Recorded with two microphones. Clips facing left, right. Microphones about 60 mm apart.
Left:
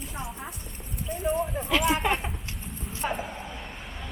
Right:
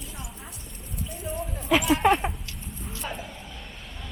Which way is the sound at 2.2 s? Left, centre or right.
Centre.